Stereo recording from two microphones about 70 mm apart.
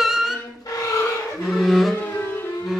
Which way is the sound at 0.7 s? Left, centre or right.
Left.